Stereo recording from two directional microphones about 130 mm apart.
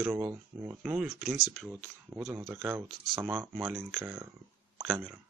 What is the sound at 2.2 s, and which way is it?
Speech, 25° right (ahead or behind).